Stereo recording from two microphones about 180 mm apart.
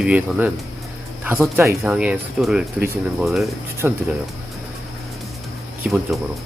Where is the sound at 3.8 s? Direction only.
10° right (ahead or behind).